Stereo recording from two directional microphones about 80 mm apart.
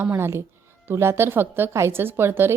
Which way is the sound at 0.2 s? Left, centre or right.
Right.